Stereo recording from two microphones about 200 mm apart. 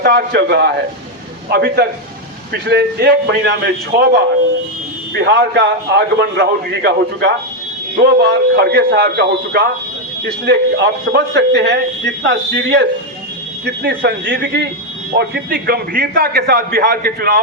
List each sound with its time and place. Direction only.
0.0 s a man's voice: 55° right (ahead or behind)